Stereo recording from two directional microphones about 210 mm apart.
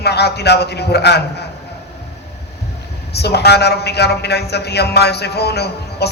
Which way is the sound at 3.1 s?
50° left (ahead or behind).